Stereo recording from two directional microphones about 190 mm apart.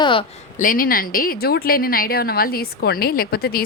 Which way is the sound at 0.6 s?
45° left (ahead or behind).